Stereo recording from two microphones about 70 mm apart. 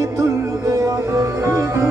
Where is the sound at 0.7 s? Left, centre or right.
Right.